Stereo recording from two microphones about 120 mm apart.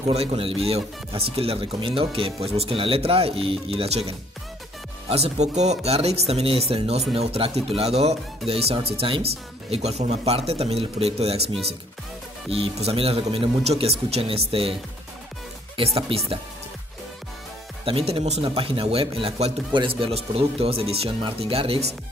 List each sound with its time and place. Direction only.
0.1 s speech: 60° right (ahead or behind)
5.1 s speech: 65° right (ahead or behind)
17.8 s speech: 50° right (ahead or behind)
19.7 s speech: 45° right (ahead or behind)